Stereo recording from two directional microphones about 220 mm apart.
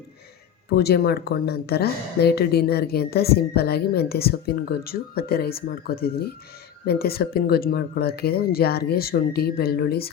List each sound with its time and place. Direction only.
0.7 s speech: 45° left (ahead or behind)